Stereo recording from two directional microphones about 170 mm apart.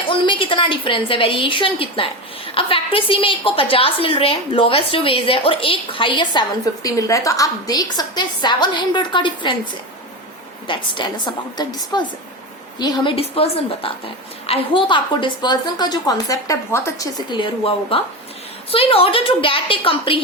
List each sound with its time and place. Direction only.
0.1 s a woman's voice: 30° left (ahead or behind)
6.8 s a woman's voice: 20° left (ahead or behind)
10.7 s a woman's voice: 25° left (ahead or behind)
17.3 s a woman's voice: 30° left (ahead or behind)